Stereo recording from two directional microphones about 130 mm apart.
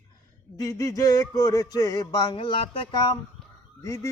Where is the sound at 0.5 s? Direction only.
25° left (ahead or behind).